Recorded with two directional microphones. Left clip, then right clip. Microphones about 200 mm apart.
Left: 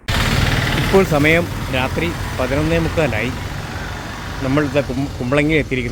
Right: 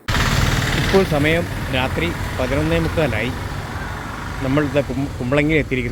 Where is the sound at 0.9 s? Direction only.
15° left (ahead or behind).